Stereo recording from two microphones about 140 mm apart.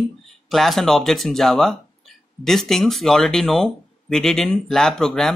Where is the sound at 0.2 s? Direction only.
Centre (ahead or behind).